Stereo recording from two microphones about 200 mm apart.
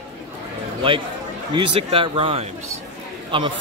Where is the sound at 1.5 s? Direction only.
25° right (ahead or behind).